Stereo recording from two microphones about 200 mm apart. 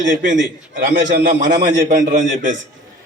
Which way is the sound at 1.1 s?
40° right (ahead or behind).